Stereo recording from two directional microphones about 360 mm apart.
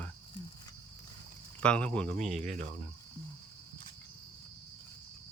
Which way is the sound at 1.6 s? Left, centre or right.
Centre.